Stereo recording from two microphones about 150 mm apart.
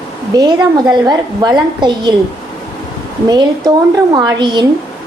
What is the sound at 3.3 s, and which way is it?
A woman's voice, 25° right (ahead or behind).